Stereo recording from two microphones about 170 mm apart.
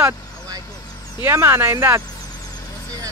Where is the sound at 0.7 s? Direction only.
25° left (ahead or behind).